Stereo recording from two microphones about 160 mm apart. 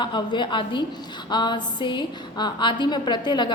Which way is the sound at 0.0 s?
30° left (ahead or behind).